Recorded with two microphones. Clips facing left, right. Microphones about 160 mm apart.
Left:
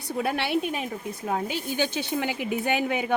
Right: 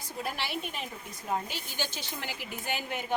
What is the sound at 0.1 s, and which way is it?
Speech, 65° left (ahead or behind).